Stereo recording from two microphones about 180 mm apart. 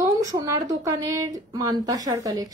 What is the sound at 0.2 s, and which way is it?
A woman's voice, 20° right (ahead or behind).